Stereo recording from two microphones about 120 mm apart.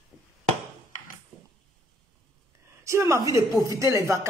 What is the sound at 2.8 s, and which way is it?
Speech, 25° right (ahead or behind).